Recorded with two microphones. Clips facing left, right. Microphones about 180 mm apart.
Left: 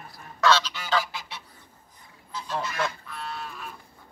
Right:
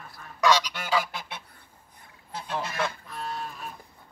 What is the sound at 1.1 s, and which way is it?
Goose, 50° right (ahead or behind).